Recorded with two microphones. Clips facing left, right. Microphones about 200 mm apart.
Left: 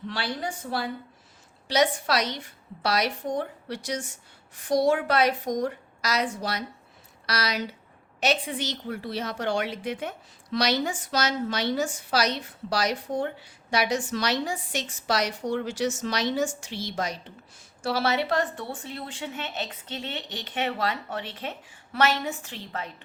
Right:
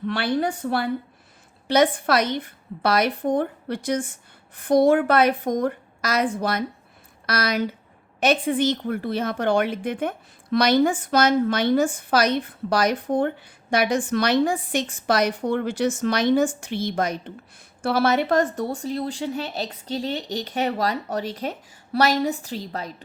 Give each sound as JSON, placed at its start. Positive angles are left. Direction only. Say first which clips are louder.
{"t": 0.1, "sound": "a woman's voice", "louder": "right 9 dB", "side_deg": -60}